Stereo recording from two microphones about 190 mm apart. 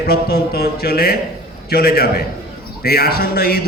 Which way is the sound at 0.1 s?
55° left (ahead or behind).